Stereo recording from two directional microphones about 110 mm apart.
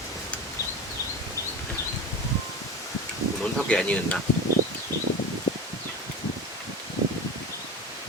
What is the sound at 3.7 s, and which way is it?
Speech, 10° left (ahead or behind).